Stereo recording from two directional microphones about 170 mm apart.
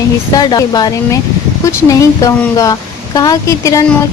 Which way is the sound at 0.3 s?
25° left (ahead or behind).